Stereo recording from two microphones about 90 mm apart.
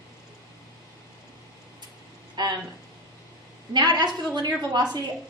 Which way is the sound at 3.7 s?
50° right (ahead or behind).